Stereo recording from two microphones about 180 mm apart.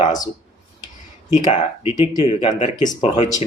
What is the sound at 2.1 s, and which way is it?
Speech, 25° left (ahead or behind).